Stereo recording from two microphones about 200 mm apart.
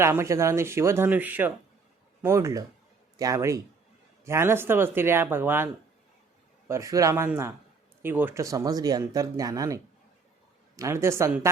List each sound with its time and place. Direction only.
0.0 s speech: 15° right (ahead or behind)
6.7 s speech: 15° right (ahead or behind)